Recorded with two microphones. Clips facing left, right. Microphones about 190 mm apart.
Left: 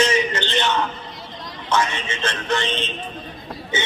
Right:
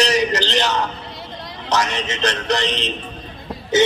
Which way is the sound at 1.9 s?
40° right (ahead or behind).